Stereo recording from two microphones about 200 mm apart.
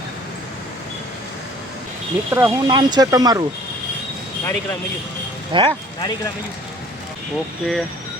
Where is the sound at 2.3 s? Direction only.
15° right (ahead or behind).